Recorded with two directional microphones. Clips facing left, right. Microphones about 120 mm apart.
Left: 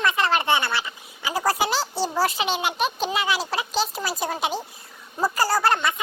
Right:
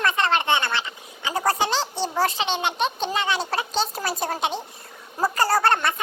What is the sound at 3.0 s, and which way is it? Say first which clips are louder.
Speech: even; 5° left (ahead or behind).